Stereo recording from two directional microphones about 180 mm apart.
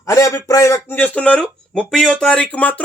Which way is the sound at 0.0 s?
15° left (ahead or behind).